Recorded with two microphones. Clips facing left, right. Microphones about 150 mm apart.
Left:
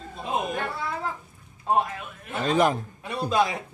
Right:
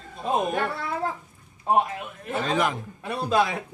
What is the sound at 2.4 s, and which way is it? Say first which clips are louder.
Speech: left 4 dB; 35° left (ahead or behind).